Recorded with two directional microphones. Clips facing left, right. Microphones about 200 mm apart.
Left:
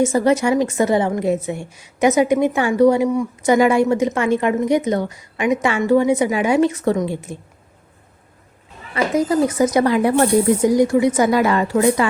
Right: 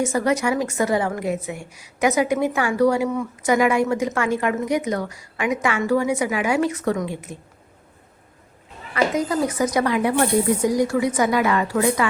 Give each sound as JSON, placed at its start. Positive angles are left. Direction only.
{"t": 0.0, "sound": "a woman's voice", "side_deg": 25}
{"t": 3.4, "sound": "a woman's voice", "side_deg": 30}
{"t": 9.1, "sound": "a woman's voice", "side_deg": 25}
{"t": 10.6, "sound": "a woman's voice", "side_deg": 25}